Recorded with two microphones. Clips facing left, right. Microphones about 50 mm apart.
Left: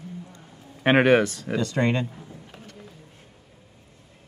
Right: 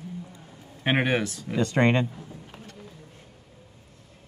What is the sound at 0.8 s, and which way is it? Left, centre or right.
Speech, left.